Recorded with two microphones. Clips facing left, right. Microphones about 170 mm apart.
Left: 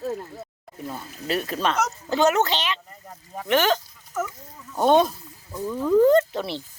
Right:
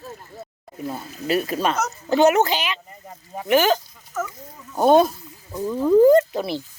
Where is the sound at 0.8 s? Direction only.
20° right (ahead or behind).